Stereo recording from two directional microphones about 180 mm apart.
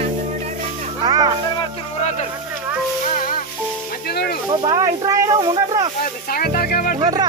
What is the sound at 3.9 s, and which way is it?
Music, 60° left (ahead or behind).